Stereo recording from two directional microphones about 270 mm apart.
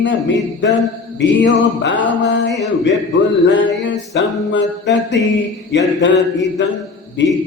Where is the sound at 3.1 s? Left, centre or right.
Left.